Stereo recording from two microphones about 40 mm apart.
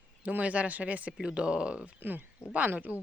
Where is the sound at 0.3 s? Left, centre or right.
Right.